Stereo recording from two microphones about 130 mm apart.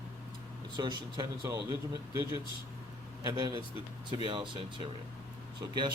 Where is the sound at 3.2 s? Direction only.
35° right (ahead or behind).